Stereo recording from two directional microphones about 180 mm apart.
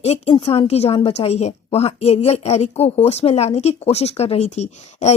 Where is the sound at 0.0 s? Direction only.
35° left (ahead or behind).